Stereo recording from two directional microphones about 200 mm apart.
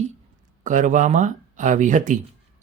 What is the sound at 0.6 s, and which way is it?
Speech, 40° right (ahead or behind).